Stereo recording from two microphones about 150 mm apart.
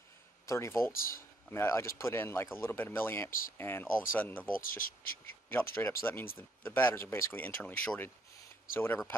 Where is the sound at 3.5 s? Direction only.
15° left (ahead or behind).